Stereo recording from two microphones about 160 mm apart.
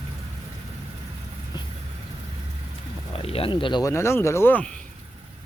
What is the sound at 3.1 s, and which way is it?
Speech, 35° left (ahead or behind).